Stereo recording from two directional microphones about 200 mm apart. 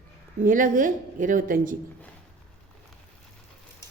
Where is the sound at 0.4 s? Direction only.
40° right (ahead or behind).